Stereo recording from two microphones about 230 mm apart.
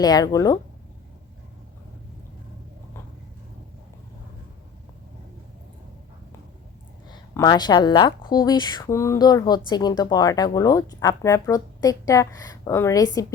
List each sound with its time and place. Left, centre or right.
0.0 s speech: centre
7.1 s speech: centre